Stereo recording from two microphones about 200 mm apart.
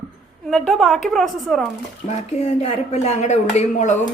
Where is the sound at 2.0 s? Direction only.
35° left (ahead or behind).